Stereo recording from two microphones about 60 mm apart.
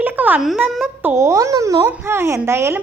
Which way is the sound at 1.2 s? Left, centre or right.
Right.